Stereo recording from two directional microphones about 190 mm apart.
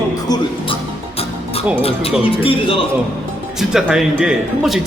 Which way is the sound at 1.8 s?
30° left (ahead or behind).